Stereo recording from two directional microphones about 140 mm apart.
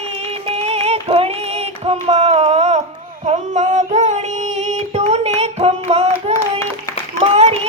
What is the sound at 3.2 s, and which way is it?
Music, 55° right (ahead or behind).